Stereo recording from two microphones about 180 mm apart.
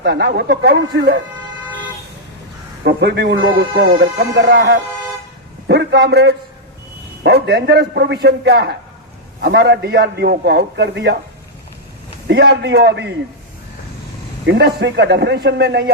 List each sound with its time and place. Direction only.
0.0 s a man's voice: 65° right (ahead or behind)
2.8 s a man's voice: 65° right (ahead or behind)
4.2 s a man's voice: 60° right (ahead or behind)
12.3 s a man's voice: 65° right (ahead or behind)
14.4 s a man's voice: 70° right (ahead or behind)